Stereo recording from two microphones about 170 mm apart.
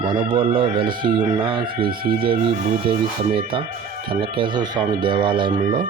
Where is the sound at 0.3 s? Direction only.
30° right (ahead or behind).